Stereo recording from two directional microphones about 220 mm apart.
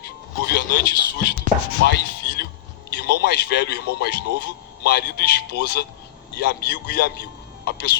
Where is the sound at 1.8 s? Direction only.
50° left (ahead or behind).